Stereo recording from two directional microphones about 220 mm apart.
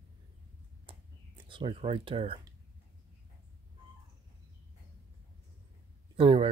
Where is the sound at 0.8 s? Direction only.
20° right (ahead or behind).